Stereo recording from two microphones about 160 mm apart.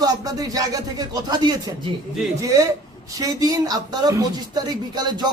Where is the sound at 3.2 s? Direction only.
20° right (ahead or behind).